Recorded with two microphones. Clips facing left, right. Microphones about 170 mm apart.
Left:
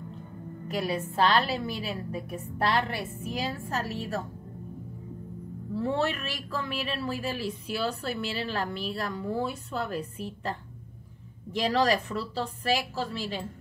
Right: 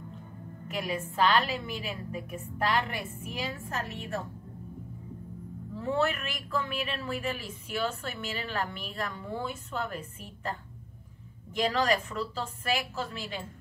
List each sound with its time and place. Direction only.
0.7 s speech: 35° left (ahead or behind)
5.8 s speech: 35° left (ahead or behind)
11.5 s speech: 35° left (ahead or behind)